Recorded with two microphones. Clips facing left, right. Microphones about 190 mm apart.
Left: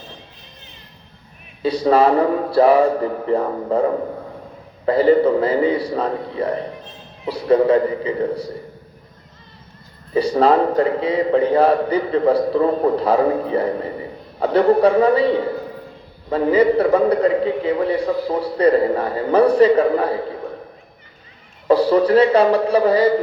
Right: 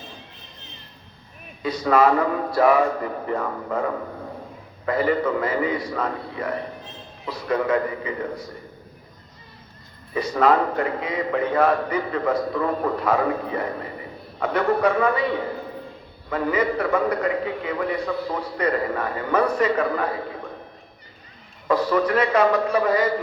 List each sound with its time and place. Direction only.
1.6 s a man's voice: 30° left (ahead or behind)
10.2 s a man's voice: 30° left (ahead or behind)
21.7 s a man's voice: 30° left (ahead or behind)